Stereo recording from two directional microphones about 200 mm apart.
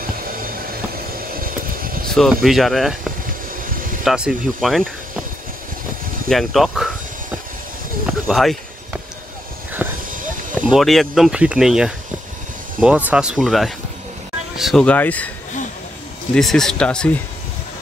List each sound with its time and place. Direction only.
0.2 s a sound: 45° right (ahead or behind)
1.1 s vehicle: 45° right (ahead or behind)
2.1 s speech: centre (ahead or behind)
3.6 s vehicle: 45° right (ahead or behind)
4.0 s speech: 5° right (ahead or behind)
6.2 s speech: centre (ahead or behind)
8.1 s a sound: centre (ahead or behind)
9.8 s a sound: 5° right (ahead or behind)
10.5 s speech: 5° right (ahead or behind)
16.3 s speech: centre (ahead or behind)